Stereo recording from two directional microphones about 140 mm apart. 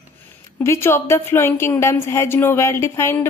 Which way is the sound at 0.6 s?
20° left (ahead or behind).